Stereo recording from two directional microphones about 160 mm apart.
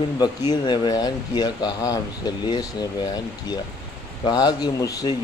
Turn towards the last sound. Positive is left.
turn(degrees=20)  # may be behind; listen again after turning